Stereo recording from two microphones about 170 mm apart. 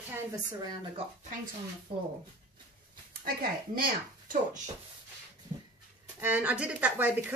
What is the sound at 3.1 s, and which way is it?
Speech, 60° right (ahead or behind).